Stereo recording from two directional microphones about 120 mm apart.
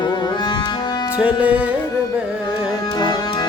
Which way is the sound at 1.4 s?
10° right (ahead or behind).